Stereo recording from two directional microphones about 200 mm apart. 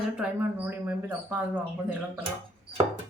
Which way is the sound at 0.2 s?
10° right (ahead or behind).